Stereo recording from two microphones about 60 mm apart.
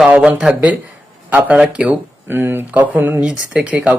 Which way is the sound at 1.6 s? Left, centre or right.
Centre.